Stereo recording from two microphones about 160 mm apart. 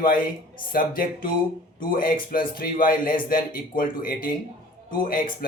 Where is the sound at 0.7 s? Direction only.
65° left (ahead or behind).